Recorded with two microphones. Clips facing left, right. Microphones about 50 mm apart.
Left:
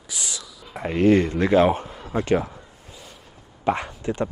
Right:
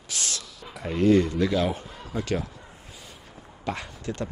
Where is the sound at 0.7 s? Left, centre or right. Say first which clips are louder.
Left 3 dB; left.